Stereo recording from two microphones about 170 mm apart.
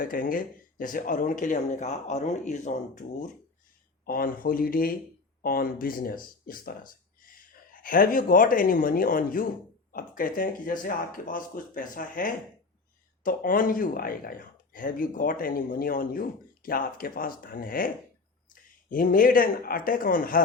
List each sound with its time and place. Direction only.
0.0 s speech: 55° left (ahead or behind)
4.0 s speech: 60° left (ahead or behind)